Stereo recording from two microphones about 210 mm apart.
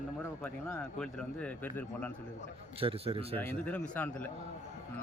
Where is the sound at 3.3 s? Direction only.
10° left (ahead or behind).